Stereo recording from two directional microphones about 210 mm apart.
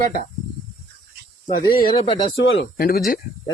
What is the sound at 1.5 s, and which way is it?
Speech, 45° left (ahead or behind).